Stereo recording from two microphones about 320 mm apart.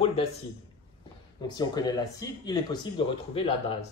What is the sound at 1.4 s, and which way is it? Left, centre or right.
Speech, centre.